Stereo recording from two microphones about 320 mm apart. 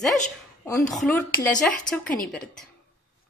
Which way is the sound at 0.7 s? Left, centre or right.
Centre.